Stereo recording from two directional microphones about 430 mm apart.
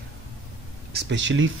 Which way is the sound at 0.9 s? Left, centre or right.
Right.